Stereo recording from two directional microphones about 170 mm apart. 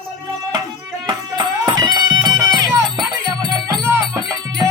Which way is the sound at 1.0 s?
25° right (ahead or behind).